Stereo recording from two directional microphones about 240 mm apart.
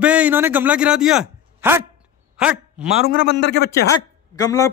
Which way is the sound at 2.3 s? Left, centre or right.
Centre.